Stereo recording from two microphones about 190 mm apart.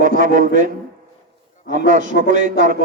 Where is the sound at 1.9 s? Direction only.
40° right (ahead or behind).